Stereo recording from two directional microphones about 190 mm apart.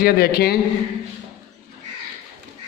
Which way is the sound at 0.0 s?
55° left (ahead or behind).